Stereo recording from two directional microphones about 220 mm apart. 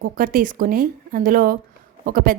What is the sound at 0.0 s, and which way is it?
Speech, 40° right (ahead or behind).